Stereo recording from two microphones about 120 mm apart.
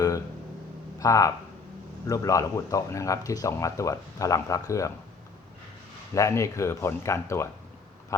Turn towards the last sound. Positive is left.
turn(degrees=25)  # may be behind; listen again after turning